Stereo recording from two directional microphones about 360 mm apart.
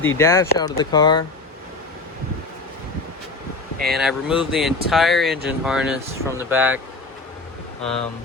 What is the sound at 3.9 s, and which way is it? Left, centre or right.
Speech, centre.